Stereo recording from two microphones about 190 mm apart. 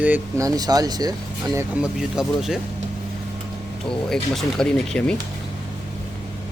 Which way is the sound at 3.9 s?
5° left (ahead or behind).